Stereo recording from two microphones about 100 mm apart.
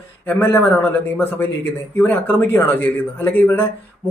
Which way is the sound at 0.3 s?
25° left (ahead or behind).